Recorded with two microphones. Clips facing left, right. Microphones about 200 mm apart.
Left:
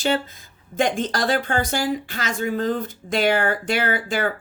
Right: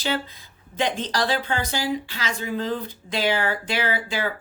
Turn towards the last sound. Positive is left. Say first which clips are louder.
# left 3 dB
turn(degrees=50)  # may be behind; listen again after turning